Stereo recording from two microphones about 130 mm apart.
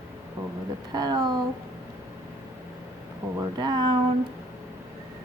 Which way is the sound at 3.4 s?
35° right (ahead or behind).